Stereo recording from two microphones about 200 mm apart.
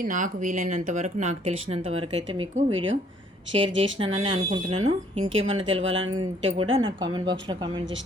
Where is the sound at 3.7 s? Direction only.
70° right (ahead or behind).